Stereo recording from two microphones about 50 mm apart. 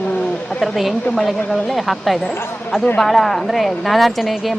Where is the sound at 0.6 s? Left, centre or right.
Centre.